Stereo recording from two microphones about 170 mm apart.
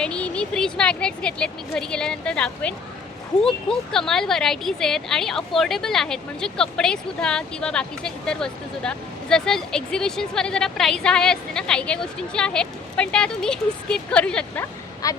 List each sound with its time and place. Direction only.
0.0 s speech: 5° left (ahead or behind)
15.0 s speech: 20° left (ahead or behind)